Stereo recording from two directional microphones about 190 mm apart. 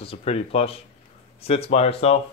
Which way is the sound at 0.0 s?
30° left (ahead or behind).